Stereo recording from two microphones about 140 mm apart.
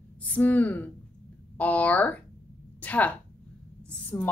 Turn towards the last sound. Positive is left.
turn(degrees=10)  # may be behind; listen again after turning